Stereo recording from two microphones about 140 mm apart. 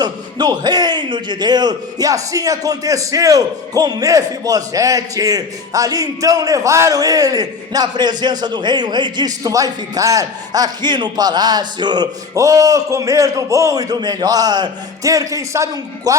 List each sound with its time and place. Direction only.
0.0 s a man's voice: 30° right (ahead or behind)